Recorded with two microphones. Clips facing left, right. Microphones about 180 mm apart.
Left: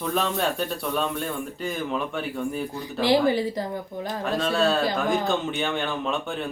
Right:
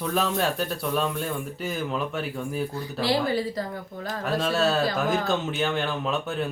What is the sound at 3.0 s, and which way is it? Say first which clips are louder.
Speech: left 4 dB; 20° left (ahead or behind).